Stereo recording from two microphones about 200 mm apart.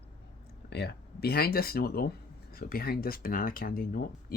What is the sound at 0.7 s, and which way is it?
Speech, 55° left (ahead or behind).